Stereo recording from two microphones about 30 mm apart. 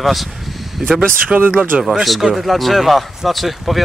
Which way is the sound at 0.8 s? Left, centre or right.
Centre.